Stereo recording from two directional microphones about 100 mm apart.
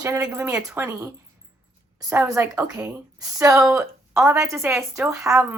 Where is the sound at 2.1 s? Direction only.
30° right (ahead or behind).